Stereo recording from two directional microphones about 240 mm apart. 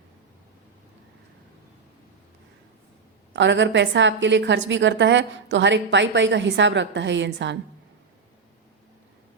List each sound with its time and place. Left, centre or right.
3.3 s a woman's voice: right